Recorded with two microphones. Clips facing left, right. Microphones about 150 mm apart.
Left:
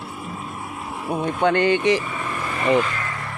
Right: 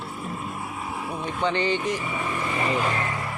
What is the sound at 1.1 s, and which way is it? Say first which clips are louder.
Speech: left 7 dB; 55° left (ahead or behind).